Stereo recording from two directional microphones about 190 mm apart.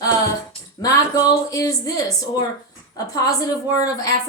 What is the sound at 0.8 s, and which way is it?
A woman's voice, 20° left (ahead or behind).